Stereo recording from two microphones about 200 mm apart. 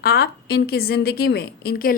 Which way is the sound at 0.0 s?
50° left (ahead or behind).